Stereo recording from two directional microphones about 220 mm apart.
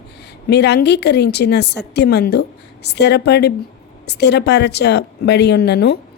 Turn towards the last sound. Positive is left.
turn(degrees=50)  # may be behind; listen again after turning